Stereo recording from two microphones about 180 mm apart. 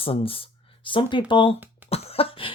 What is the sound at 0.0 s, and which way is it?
Speech, 30° left (ahead or behind).